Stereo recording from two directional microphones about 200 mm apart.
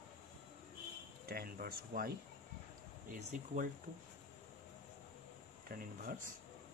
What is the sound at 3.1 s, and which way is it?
Speech, 40° right (ahead or behind).